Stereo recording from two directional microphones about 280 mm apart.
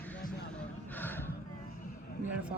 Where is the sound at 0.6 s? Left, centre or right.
Centre.